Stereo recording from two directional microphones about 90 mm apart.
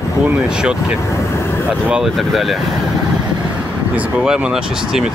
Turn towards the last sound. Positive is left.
turn(degrees=-10)  # may be behind; listen again after turning